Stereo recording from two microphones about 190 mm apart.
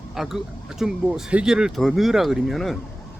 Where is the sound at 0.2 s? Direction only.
Centre (ahead or behind).